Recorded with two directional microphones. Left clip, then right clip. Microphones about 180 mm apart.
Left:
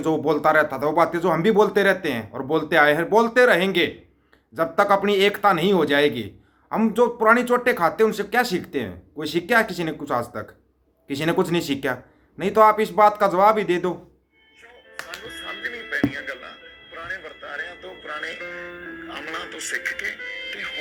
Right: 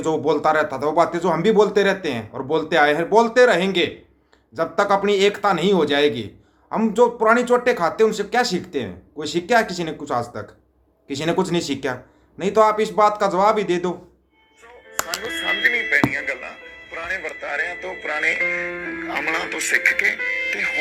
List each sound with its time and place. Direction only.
0.0 s a man's voice: 5° left (ahead or behind)
15.0 s a sound: 40° right (ahead or behind); by 16.4 s 20° right (ahead or behind)
17.1 s music: 30° right (ahead or behind)
19.7 s speech: 30° right (ahead or behind)